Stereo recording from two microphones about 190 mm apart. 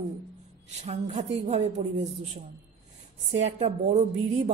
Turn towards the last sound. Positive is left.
turn(degrees=-35)  # may be behind; listen again after turning